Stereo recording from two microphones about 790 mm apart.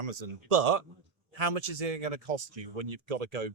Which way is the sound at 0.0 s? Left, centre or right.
Right.